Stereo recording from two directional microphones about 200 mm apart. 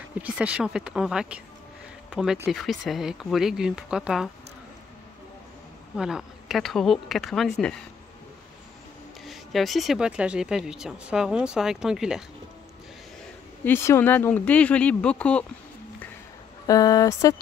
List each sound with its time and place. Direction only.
0.1 s speech: 5° right (ahead or behind)
5.9 s speech: 5° right (ahead or behind)
9.2 s speech: centre (ahead or behind)
13.7 s speech: 10° left (ahead or behind)
16.6 s speech: 15° left (ahead or behind)